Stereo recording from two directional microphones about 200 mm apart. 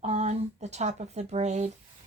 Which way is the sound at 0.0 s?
35° right (ahead or behind).